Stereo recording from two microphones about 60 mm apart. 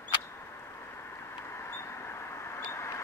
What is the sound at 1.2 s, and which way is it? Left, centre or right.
Vehicle, left.